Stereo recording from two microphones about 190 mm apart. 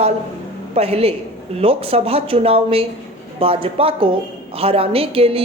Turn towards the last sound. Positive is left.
turn(degrees=-30)  # may be behind; listen again after turning